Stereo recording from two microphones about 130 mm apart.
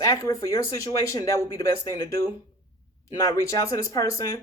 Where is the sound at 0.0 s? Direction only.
25° left (ahead or behind).